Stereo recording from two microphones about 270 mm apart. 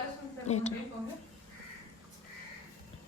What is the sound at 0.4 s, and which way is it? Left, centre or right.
Speech, left.